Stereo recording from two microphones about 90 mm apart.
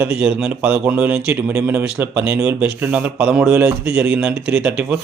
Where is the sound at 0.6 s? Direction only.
20° right (ahead or behind).